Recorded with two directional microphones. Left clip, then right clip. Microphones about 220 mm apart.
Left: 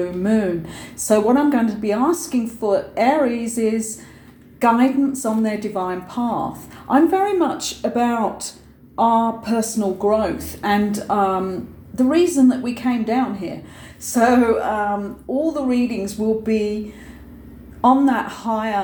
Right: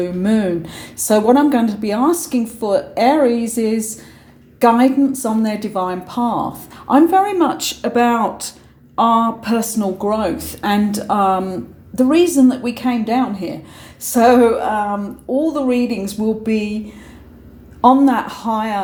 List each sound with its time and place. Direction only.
0.0 s speech: 45° right (ahead or behind)
17.7 s speech: 45° right (ahead or behind)